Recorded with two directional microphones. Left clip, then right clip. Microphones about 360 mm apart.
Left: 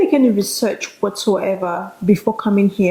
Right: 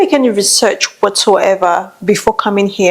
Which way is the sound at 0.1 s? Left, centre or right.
Right.